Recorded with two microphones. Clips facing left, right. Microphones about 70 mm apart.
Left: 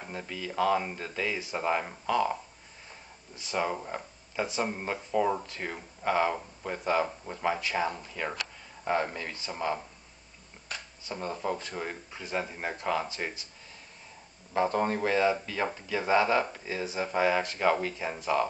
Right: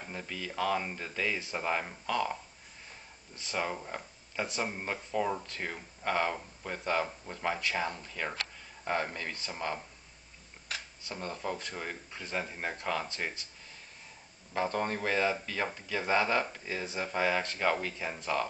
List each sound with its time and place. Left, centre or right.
0.0 s speech: centre
3.3 s speech: centre
4.6 s speech: centre
5.3 s speech: centre
11.1 s speech: centre
14.5 s speech: centre